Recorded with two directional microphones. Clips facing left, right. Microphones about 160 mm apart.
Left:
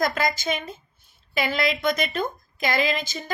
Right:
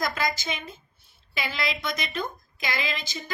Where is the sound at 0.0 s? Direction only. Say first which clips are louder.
Left 4 dB; 50° left (ahead or behind).